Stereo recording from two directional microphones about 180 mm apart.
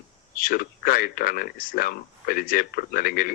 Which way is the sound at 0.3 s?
55° left (ahead or behind).